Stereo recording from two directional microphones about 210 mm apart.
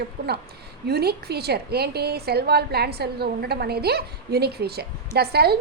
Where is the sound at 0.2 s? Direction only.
55° right (ahead or behind).